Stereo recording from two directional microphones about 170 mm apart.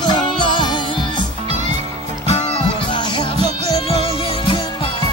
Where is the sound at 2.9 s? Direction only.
25° left (ahead or behind).